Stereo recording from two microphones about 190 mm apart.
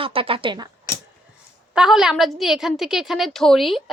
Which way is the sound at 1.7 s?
5° right (ahead or behind).